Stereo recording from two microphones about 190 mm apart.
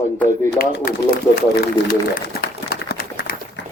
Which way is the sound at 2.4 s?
55° left (ahead or behind).